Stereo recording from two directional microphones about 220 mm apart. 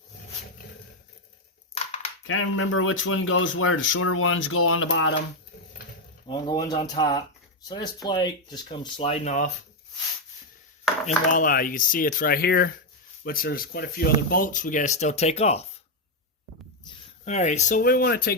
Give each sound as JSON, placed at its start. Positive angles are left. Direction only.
{"t": 1.7, "sound": "a sound", "side_deg": 30}
{"t": 2.2, "sound": "speech", "side_deg": 65}
{"t": 6.2, "sound": "speech", "side_deg": 20}
{"t": 11.3, "sound": "speech", "side_deg": 40}
{"t": 17.2, "sound": "speech", "side_deg": 30}